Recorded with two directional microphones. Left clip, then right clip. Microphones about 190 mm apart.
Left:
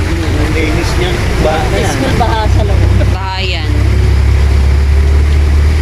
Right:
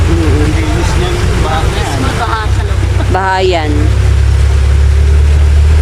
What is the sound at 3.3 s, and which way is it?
Vehicle, 35° right (ahead or behind).